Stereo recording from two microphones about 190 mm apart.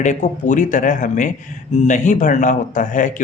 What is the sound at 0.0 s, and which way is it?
Speech, 40° left (ahead or behind).